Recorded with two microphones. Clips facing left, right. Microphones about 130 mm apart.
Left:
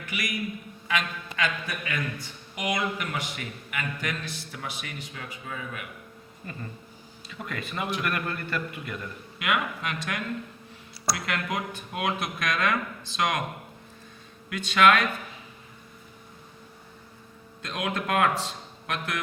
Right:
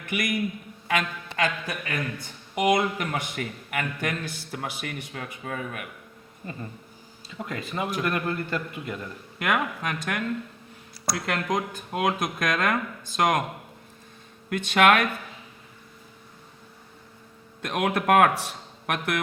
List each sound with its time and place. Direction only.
0.1 s a man's voice: 55° right (ahead or behind)
1.4 s speech: 40° right (ahead or behind)
2.1 s a man's voice: 55° right (ahead or behind)
7.3 s a man's voice: 25° right (ahead or behind)
9.4 s a man's voice: 40° right (ahead or behind)
14.5 s a man's voice: 55° right (ahead or behind)
17.6 s a man's voice: 60° right (ahead or behind)